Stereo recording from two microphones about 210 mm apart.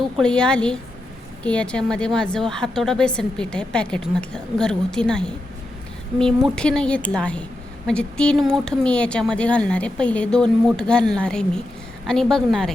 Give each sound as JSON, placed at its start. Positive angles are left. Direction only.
{"t": 0.2, "sound": "a woman's voice", "side_deg": 5}